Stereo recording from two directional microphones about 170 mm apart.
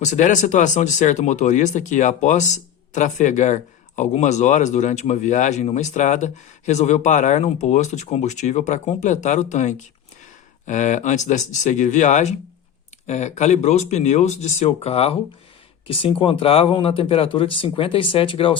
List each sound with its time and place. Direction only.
0.0 s speech: 45° left (ahead or behind)